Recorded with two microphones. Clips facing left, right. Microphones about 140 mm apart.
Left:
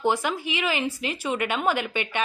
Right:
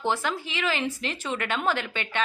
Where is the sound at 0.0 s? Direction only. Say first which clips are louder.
Left 3 dB; 15° left (ahead or behind).